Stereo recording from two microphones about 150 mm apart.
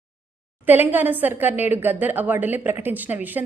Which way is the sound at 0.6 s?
10° right (ahead or behind).